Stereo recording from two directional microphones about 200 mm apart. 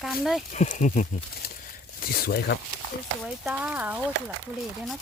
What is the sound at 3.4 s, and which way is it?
Speech, 5° right (ahead or behind).